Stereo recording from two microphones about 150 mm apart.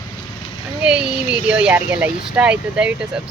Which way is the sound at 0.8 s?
5° right (ahead or behind).